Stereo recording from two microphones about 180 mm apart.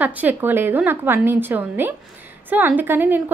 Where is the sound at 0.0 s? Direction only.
10° right (ahead or behind).